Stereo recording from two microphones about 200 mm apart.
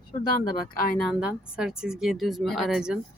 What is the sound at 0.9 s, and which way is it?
Speech, centre (ahead or behind).